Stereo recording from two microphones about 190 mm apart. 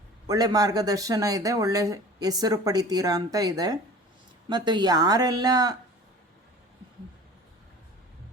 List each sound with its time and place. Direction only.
0.3 s speech: 20° right (ahead or behind)